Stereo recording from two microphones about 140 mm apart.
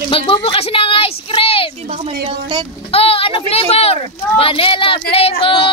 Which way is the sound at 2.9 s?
40° left (ahead or behind).